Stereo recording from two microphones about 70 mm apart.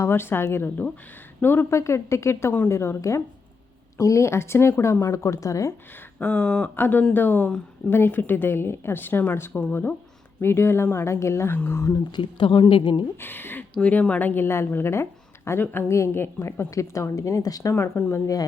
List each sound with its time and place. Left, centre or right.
0.0 s a woman's voice: left
1.7 s a woman's voice: left
6.1 s a sound: centre
6.7 s a woman's voice: left
9.5 s a woman's voice: left
12.1 s a woman's voice: left
13.1 s speech: left
13.7 s speech: centre
14.4 s a woman's voice: left